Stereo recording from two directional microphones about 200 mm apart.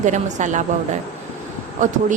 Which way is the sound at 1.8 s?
40° right (ahead or behind).